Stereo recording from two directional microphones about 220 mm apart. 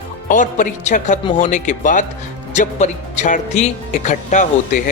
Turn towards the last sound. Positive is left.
turn(degrees=35)  # may be behind; listen again after turning